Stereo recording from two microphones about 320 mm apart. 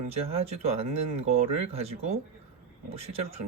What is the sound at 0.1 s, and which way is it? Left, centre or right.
Speech, centre.